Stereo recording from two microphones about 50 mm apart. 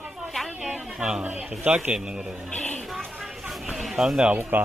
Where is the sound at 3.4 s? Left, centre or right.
Centre.